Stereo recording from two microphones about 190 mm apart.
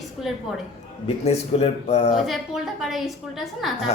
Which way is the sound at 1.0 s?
35° left (ahead or behind).